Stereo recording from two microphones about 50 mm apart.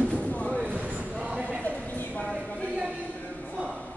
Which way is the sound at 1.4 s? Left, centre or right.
Left.